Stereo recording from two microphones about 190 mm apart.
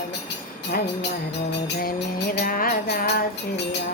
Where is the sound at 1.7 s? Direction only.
50° left (ahead or behind).